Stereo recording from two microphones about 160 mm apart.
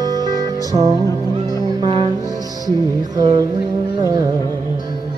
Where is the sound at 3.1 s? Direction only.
25° right (ahead or behind).